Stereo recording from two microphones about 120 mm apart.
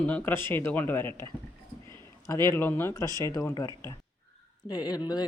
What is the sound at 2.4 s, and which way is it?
Speech, 20° left (ahead or behind).